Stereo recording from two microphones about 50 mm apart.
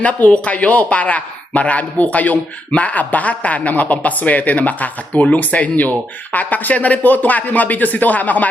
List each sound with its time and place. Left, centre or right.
0.0 s a man's voice: left